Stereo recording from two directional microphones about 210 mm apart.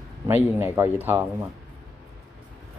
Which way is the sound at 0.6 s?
10° right (ahead or behind).